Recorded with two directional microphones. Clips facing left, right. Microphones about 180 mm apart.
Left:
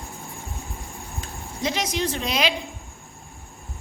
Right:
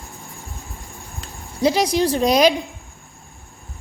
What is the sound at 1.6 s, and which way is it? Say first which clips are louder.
Speech: right 8 dB; 35° right (ahead or behind).